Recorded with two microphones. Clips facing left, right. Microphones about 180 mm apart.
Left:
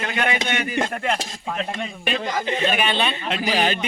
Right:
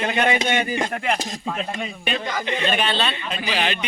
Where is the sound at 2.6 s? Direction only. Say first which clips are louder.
Even; 10° left (ahead or behind).